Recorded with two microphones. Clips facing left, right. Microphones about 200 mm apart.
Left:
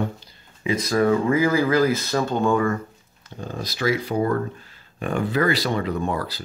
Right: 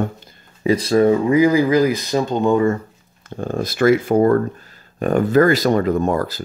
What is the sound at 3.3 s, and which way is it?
Speech, 50° right (ahead or behind).